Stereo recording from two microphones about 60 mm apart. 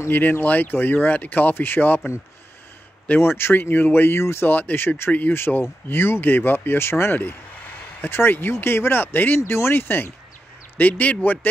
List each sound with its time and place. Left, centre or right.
0.1 s speech: left
3.2 s speech: left
4.5 s speech: left
10.8 s speech: left